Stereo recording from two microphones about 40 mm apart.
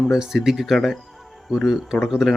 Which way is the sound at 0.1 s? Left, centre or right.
Centre.